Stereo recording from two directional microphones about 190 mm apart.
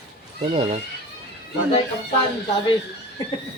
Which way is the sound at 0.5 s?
30° right (ahead or behind).